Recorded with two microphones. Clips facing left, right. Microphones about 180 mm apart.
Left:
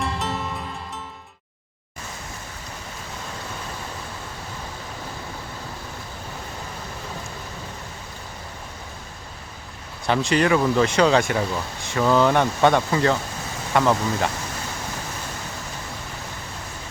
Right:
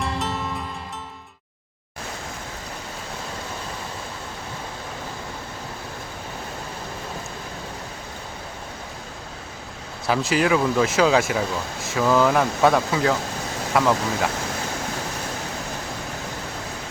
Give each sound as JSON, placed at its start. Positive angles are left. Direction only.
{"t": 0.0, "sound": "music", "side_deg": 0}
{"t": 10.1, "sound": "speech", "side_deg": -5}